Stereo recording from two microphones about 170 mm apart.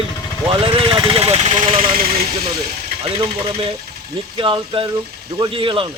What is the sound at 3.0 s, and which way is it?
A man's voice, 35° right (ahead or behind).